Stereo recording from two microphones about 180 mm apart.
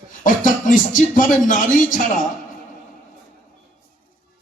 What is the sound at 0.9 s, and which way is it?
Music, 50° left (ahead or behind).